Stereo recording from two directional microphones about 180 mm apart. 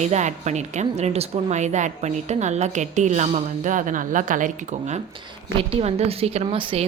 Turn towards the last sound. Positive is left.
turn(degrees=-30)  # may be behind; listen again after turning